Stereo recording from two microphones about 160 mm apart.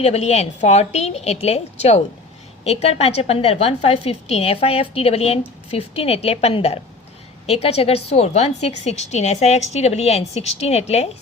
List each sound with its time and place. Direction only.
0.0 s a woman's voice: 40° left (ahead or behind)